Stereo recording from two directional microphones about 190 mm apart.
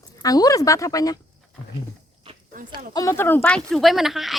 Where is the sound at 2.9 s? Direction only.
15° left (ahead or behind); by 4.3 s centre (ahead or behind).